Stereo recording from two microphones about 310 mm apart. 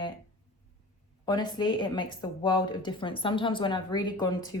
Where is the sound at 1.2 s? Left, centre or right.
Centre.